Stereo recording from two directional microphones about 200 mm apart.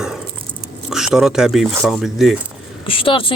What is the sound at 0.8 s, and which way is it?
Speech, centre (ahead or behind).